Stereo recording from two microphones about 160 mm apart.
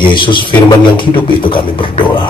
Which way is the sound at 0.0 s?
30° left (ahead or behind).